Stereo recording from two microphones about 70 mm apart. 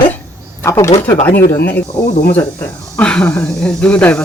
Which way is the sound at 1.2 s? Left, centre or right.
Left.